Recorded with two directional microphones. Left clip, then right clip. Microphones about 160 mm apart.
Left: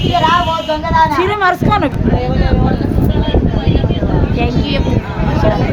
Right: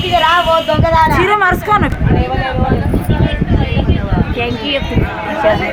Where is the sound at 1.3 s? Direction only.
50° left (ahead or behind).